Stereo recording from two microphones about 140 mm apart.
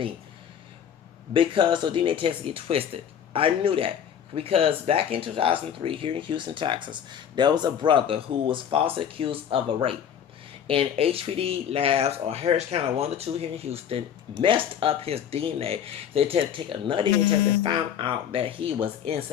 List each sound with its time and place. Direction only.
1.3 s speech: 35° right (ahead or behind)